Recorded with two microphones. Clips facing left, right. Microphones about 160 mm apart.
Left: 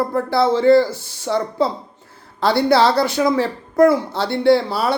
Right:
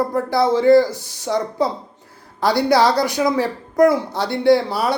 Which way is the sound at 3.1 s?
15° right (ahead or behind).